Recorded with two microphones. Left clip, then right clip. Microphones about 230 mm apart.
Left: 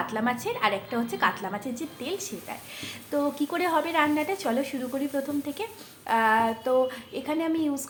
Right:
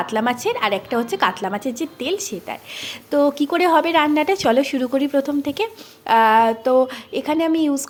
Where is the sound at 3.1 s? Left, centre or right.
Right.